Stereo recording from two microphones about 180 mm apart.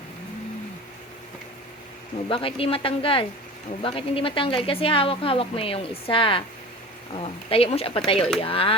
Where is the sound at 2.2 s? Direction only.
30° left (ahead or behind).